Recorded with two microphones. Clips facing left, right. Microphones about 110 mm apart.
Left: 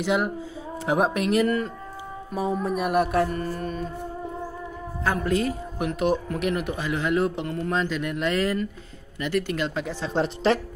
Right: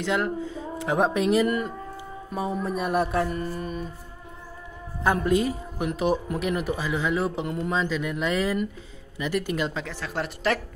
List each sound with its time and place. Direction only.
0.0 s speech: 15° left (ahead or behind)
0.8 s music: 10° left (ahead or behind)
1.4 s speech: 10° right (ahead or behind)
2.3 s music: centre (ahead or behind)
5.0 s speech: 15° right (ahead or behind)
5.9 s music: centre (ahead or behind)
7.4 s speech: 10° right (ahead or behind)
7.9 s music: centre (ahead or behind)
9.2 s speech: 5° right (ahead or behind)
10.0 s speech: 25° left (ahead or behind)